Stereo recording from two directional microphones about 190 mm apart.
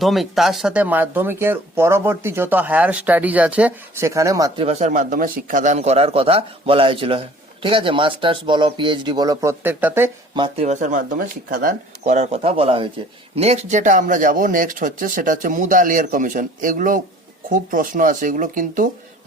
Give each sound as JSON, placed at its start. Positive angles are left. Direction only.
{"t": 0.0, "sound": "speech", "side_deg": 0}
{"t": 4.6, "sound": "a man's voice", "side_deg": -35}
{"t": 10.3, "sound": "a man's voice", "side_deg": -25}
{"t": 10.7, "sound": "speech", "side_deg": -40}